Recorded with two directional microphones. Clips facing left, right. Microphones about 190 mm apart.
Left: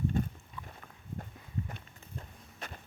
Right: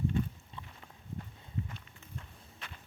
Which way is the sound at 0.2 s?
45° left (ahead or behind).